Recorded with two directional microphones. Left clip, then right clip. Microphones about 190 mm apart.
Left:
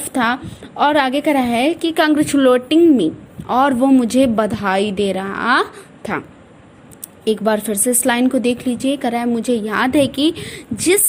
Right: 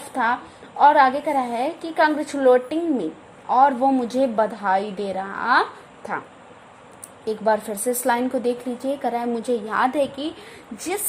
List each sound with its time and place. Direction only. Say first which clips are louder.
0.1 s a woman's voice: left 4 dB; 20° left (ahead or behind)
7.4 s a woman's voice: even; 15° left (ahead or behind)